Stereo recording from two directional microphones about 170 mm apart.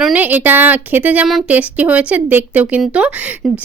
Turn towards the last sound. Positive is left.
turn(degrees=-10)  # may be behind; listen again after turning